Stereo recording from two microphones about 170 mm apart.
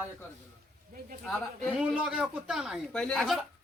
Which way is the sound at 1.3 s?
5° left (ahead or behind).